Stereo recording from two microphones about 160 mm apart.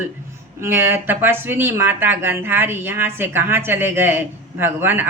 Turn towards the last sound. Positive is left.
turn(degrees=-15)  # may be behind; listen again after turning